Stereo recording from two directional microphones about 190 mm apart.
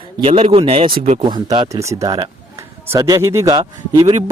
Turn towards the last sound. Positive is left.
turn(degrees=-20)  # may be behind; listen again after turning